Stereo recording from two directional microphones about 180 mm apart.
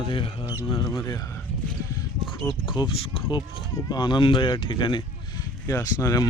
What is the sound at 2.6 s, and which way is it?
Speech, 25° left (ahead or behind).